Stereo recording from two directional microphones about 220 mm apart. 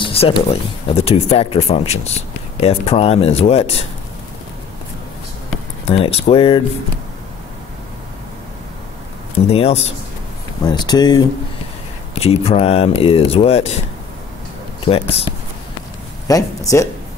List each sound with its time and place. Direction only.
0.0 s speech: 25° left (ahead or behind)
5.9 s speech: 30° left (ahead or behind)
9.5 s speech: 25° left (ahead or behind)
14.9 s speech: 25° left (ahead or behind)
16.3 s speech: 15° left (ahead or behind)